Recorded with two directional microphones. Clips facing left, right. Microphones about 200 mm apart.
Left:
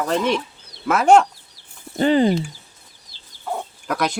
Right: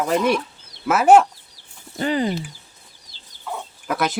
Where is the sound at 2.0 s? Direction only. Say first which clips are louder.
Left 6 dB; 30° left (ahead or behind).